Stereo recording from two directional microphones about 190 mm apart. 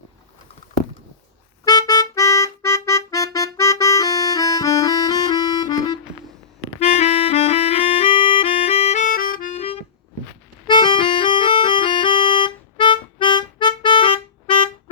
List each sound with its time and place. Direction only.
1.6 s music: 20° left (ahead or behind)
3.3 s accordion: 15° left (ahead or behind)
6.7 s music: 35° left (ahead or behind)